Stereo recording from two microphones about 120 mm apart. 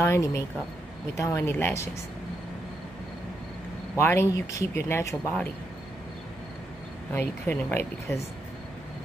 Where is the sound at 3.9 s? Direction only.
20° left (ahead or behind).